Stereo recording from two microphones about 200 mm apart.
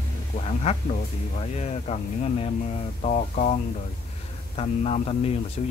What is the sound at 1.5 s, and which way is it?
Speech, 35° left (ahead or behind).